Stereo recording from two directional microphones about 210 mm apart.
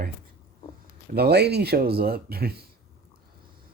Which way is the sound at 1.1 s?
50° right (ahead or behind).